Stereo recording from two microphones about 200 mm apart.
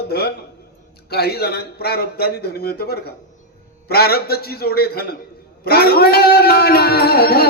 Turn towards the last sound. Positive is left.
turn(degrees=50)  # may be behind; listen again after turning